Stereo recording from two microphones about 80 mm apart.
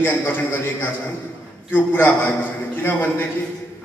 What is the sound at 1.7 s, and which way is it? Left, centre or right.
A man's voice, left.